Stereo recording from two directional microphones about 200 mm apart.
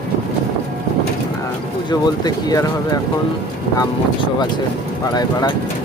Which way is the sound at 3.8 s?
20° left (ahead or behind).